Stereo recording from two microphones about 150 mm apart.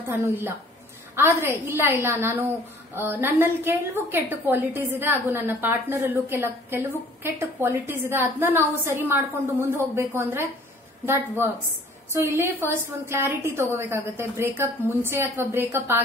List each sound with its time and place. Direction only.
0.0 s a woman's voice: 15° right (ahead or behind)